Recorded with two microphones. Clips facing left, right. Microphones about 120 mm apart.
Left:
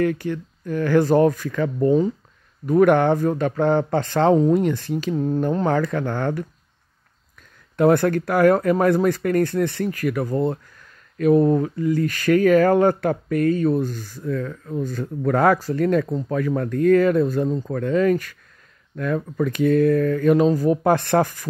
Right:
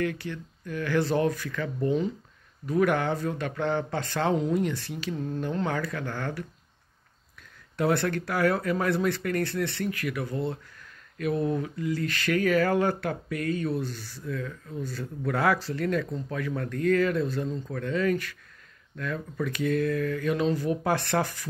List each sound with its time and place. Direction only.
0.0 s speech: 45° left (ahead or behind)
7.7 s speech: 50° left (ahead or behind)